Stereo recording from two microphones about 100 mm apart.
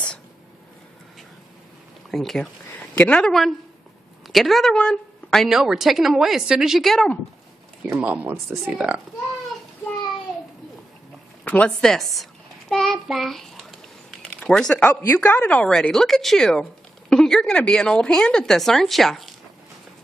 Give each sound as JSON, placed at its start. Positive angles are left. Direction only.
{"t": 2.0, "sound": "a sound", "side_deg": 0}
{"t": 3.0, "sound": "a woman's voice", "side_deg": 10}
{"t": 7.8, "sound": "speech", "side_deg": -10}
{"t": 11.4, "sound": "speech", "side_deg": 15}
{"t": 11.8, "sound": "a sound", "side_deg": 5}
{"t": 14.3, "sound": "a woman's voice", "side_deg": 5}